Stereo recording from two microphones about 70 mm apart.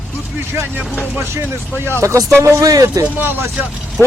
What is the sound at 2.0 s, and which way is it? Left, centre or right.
Speech, right.